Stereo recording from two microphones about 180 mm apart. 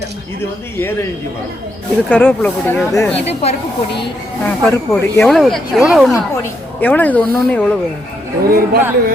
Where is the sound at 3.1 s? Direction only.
35° left (ahead or behind).